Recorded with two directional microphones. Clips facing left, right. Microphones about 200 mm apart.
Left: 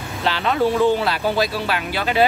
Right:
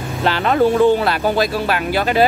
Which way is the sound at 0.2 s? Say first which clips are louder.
Right 4 dB; 50° right (ahead or behind).